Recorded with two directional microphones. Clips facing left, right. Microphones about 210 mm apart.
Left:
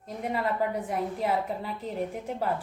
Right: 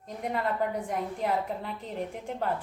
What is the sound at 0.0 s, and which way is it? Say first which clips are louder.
A woman's voice: left 1 dB; 5° left (ahead or behind).